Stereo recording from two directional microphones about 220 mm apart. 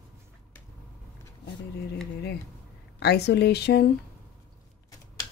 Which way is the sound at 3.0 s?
50° left (ahead or behind).